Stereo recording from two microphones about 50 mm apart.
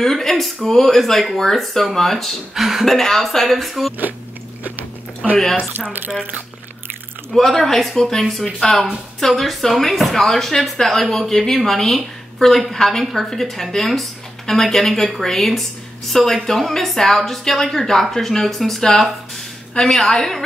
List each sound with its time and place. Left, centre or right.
0.0 s speech: centre
4.6 s chewing: right
5.4 s a woman's voice: centre
7.3 s a woman's voice: centre